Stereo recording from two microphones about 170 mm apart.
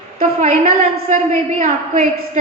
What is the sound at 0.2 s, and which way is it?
A woman's voice, 45° right (ahead or behind).